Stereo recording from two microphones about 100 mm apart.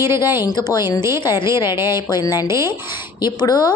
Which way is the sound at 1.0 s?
30° right (ahead or behind).